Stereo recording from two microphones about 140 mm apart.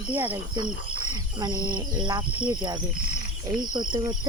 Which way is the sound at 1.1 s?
25° right (ahead or behind).